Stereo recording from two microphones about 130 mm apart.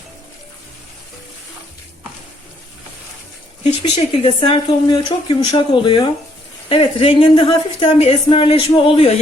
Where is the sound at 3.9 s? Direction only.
40° left (ahead or behind).